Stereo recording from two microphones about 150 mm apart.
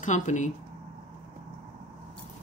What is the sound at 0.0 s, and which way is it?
Speech, 55° left (ahead or behind).